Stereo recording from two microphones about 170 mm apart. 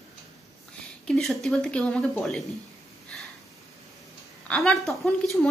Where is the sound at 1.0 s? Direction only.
5° left (ahead or behind).